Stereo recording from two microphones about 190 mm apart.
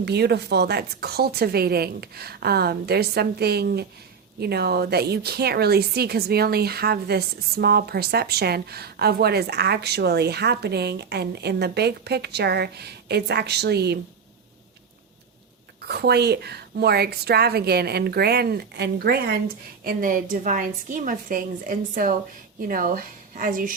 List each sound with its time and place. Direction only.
0.0 s a woman's voice: 60° right (ahead or behind)
15.9 s a woman's voice: 60° right (ahead or behind)